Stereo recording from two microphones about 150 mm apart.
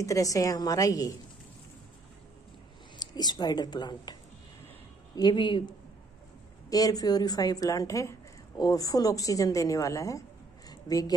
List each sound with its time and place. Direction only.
0.0 s a woman's voice: 20° left (ahead or behind)
3.0 s a woman's voice: 25° left (ahead or behind)
10.7 s a sound: 25° left (ahead or behind)